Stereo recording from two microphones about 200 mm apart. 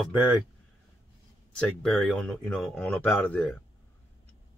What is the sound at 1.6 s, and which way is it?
Speech, centre (ahead or behind).